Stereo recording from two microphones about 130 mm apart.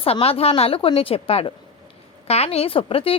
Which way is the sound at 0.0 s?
50° left (ahead or behind).